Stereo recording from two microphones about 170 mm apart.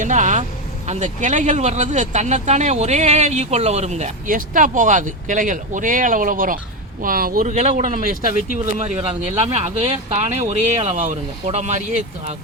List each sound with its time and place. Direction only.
0.0 s vehicle: 45° right (ahead or behind)
0.9 s speech: 45° right (ahead or behind)